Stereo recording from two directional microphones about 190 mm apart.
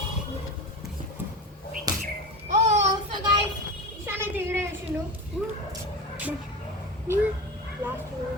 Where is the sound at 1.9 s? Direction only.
20° right (ahead or behind).